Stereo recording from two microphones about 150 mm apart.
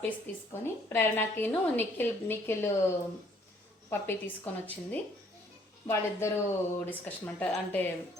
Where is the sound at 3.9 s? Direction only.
15° left (ahead or behind).